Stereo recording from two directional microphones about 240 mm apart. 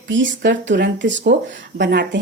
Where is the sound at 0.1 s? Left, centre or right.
Right.